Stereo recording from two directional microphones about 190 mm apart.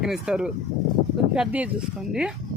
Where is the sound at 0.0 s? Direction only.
5° right (ahead or behind).